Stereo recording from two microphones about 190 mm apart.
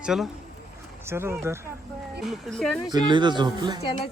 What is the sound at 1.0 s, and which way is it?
Speech, 15° right (ahead or behind).